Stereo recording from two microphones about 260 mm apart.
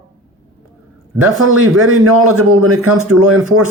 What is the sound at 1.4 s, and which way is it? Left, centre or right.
A man's voice, right.